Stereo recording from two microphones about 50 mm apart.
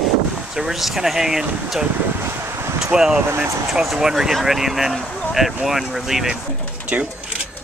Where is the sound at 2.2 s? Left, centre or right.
Right.